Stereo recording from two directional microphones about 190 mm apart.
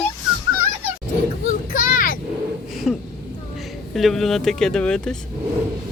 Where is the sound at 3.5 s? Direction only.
Centre (ahead or behind).